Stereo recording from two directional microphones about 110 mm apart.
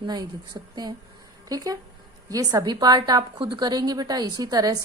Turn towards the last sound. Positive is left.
turn(degrees=-35)  # may be behind; listen again after turning